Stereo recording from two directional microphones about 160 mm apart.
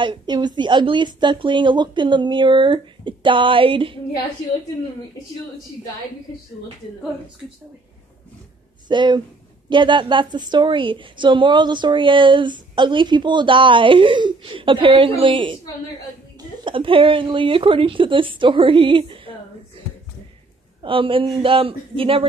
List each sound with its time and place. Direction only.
0.0 s a woman's voice: 30° right (ahead or behind)
8.8 s a woman's voice: 30° right (ahead or behind)
20.8 s a woman's voice: 35° right (ahead or behind)